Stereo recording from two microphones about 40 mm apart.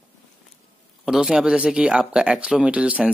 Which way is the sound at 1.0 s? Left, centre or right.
Centre.